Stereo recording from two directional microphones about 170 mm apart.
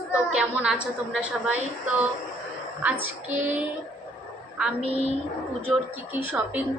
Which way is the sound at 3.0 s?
10° right (ahead or behind).